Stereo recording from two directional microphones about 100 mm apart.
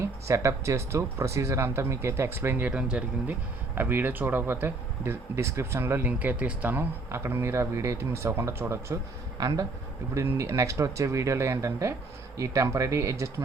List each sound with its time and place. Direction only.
0.0 s speech: 30° right (ahead or behind)
9.4 s speech: 35° right (ahead or behind)